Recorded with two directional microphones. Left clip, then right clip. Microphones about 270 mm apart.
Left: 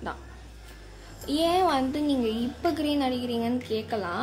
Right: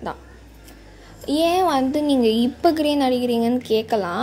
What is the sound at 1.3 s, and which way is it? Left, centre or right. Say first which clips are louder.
A child's voice: right 5 dB; centre.